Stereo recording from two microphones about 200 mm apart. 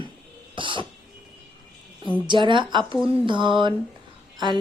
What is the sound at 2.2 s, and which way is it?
A woman's voice, 25° right (ahead or behind).